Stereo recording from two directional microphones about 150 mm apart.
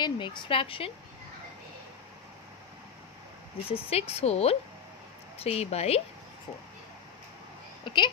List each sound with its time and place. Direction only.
0.0 s speech: 30° left (ahead or behind)
3.6 s a woman's voice: 40° left (ahead or behind)
7.8 s a sound: 30° left (ahead or behind)